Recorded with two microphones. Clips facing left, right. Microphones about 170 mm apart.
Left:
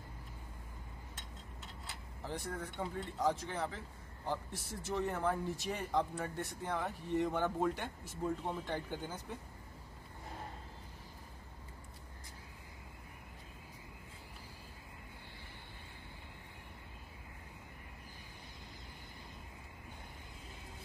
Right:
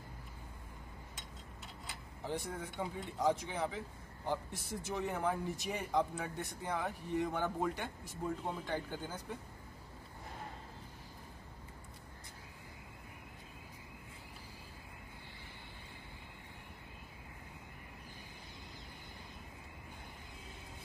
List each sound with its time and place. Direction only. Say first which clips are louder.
2.3 s speech: right 1 dB; centre (ahead or behind)
4.3 s speech: right 2 dB; 15° right (ahead or behind)
4.9 s speech: left 1 dB; 5° right (ahead or behind)